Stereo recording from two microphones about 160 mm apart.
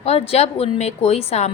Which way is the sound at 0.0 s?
40° left (ahead or behind).